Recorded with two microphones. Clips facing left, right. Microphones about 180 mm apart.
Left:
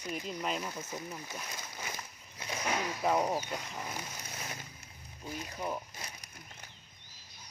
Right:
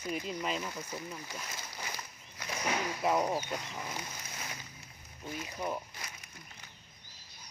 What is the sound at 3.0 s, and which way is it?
Speech, 5° left (ahead or behind).